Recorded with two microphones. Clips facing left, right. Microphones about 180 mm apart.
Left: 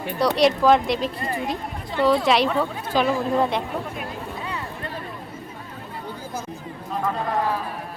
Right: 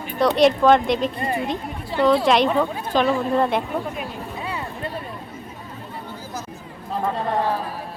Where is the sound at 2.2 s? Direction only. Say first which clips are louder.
Right 2 dB; centre (ahead or behind).